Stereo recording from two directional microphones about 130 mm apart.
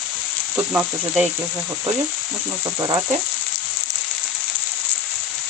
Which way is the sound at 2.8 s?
25° right (ahead or behind).